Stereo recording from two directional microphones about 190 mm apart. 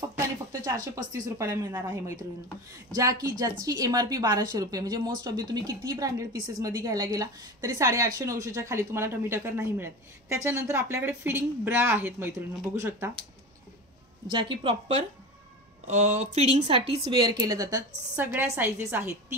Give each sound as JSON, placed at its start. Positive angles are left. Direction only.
{"t": 0.9, "sound": "a woman's voice", "side_deg": -15}
{"t": 14.3, "sound": "a woman's voice", "side_deg": -25}
{"t": 15.9, "sound": "a woman's voice", "side_deg": -40}